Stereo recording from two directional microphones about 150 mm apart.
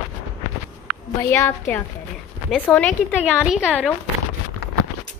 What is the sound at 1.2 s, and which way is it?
Speech, 15° left (ahead or behind).